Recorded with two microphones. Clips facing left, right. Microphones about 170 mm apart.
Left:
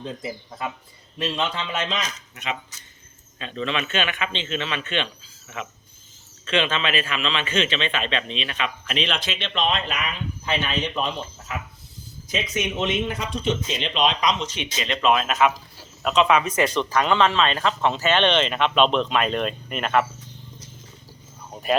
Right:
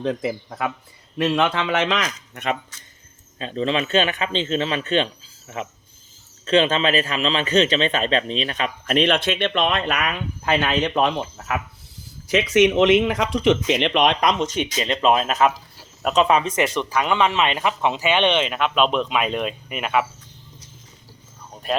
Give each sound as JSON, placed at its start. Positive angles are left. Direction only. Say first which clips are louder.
{"t": 0.0, "sound": "speech", "louder": "right 8 dB", "side_deg": -85}
{"t": 3.3, "sound": "a man's voice", "louder": "right 5 dB", "side_deg": -35}
{"t": 12.3, "sound": "a man's voice", "louder": "right 11 dB", "side_deg": -85}
{"t": 16.6, "sound": "speech", "louder": "even", "side_deg": -10}
{"t": 21.5, "sound": "wild animals", "louder": "left 2 dB", "side_deg": 5}